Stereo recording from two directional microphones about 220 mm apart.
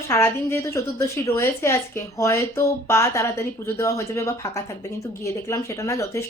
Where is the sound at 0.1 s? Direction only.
10° left (ahead or behind).